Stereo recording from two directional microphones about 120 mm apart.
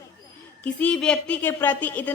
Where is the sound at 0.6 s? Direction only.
10° left (ahead or behind).